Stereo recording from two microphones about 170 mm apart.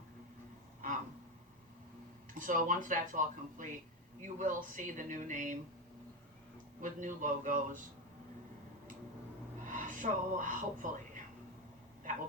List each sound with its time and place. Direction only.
2.4 s speech: 50° right (ahead or behind)
6.8 s speech: 50° right (ahead or behind)
9.6 s speech: 50° right (ahead or behind)